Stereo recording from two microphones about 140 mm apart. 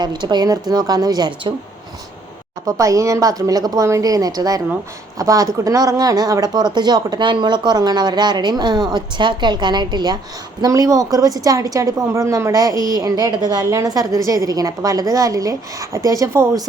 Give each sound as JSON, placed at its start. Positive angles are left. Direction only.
{"t": 0.0, "sound": "a woman's voice", "side_deg": -30}
{"t": 2.6, "sound": "a woman's voice", "side_deg": -25}